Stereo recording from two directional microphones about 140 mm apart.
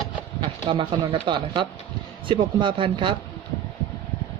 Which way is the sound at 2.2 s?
35° right (ahead or behind).